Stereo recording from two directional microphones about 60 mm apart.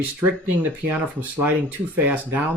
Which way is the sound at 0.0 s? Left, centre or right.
Right.